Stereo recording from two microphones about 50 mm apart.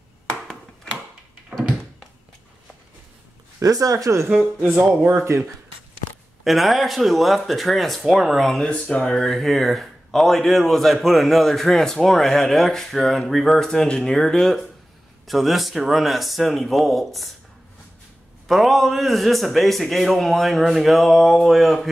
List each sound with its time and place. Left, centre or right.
3.5 s speech: right
4.6 s speech: centre
5.3 s speech: right
6.4 s a man's voice: centre
8.5 s speech: left
9.1 s a man's voice: centre
18.5 s a man's voice: centre